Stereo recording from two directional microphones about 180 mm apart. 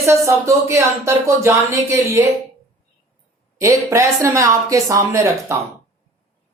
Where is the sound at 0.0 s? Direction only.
15° right (ahead or behind).